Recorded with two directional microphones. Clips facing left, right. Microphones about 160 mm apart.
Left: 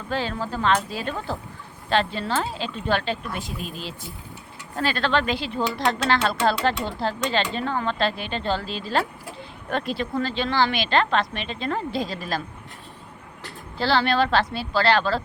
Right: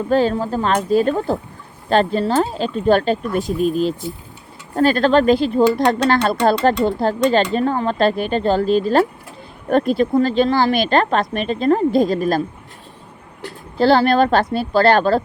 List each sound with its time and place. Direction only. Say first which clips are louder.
0.1 s speech: right 10 dB; 45° right (ahead or behind)
13.7 s speech: right 8 dB; 45° right (ahead or behind)